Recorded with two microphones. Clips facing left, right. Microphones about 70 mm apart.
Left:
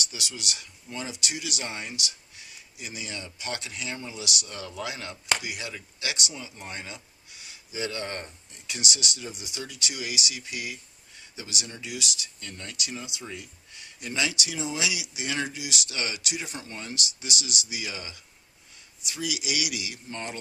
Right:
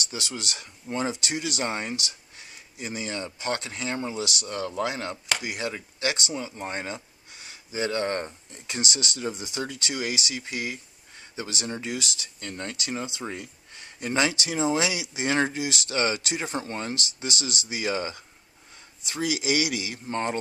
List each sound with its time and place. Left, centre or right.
0.1 s speech: right